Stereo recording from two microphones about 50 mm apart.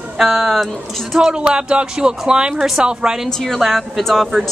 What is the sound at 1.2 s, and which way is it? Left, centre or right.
Speech, centre.